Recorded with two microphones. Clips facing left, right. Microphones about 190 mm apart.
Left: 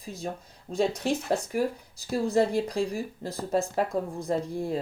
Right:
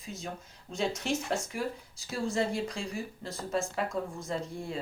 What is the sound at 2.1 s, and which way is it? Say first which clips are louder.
Speech: left 7 dB; 40° left (ahead or behind).